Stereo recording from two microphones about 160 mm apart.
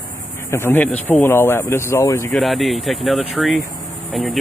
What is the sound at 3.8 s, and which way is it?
Cricket, centre (ahead or behind).